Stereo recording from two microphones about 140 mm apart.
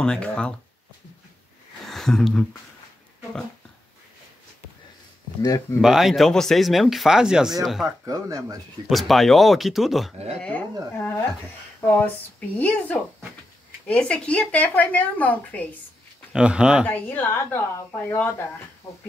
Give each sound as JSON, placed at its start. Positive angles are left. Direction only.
{"t": 0.0, "sound": "a woman's voice", "side_deg": 5}
{"t": 1.9, "sound": "speech", "side_deg": 5}
{"t": 5.4, "sound": "speech", "side_deg": 25}
{"t": 5.8, "sound": "speech", "side_deg": -5}
{"t": 8.0, "sound": "speech", "side_deg": -25}
{"t": 8.8, "sound": "speech", "side_deg": 0}
{"t": 10.4, "sound": "a woman's voice", "side_deg": 10}
{"t": 16.3, "sound": "speech", "side_deg": -5}
{"t": 16.8, "sound": "a woman's voice", "side_deg": 15}